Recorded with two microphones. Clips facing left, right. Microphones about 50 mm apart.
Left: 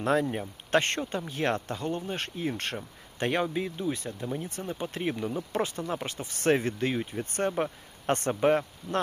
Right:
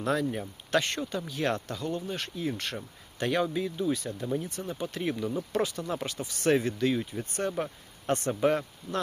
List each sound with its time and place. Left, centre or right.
0.0 s speech: left
4.1 s speech: centre
4.4 s speech: left
8.3 s speech: left